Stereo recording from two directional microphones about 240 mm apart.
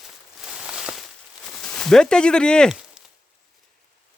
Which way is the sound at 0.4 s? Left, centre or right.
Centre.